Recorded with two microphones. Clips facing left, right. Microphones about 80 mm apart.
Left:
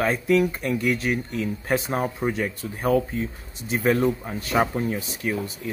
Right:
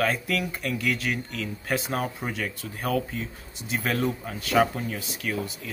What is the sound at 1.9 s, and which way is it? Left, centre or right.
Speech, left.